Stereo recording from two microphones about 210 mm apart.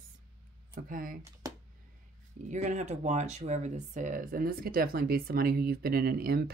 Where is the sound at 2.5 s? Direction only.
35° right (ahead or behind).